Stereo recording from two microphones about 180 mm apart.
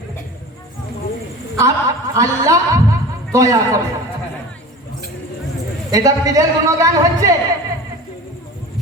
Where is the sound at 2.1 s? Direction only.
20° right (ahead or behind).